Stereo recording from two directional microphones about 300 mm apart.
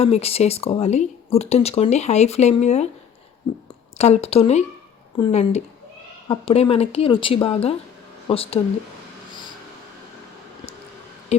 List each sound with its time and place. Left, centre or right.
0.0 s speech: centre
3.9 s speech: left
11.3 s speech: left